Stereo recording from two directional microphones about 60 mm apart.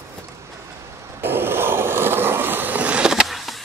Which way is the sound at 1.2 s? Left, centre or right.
Right.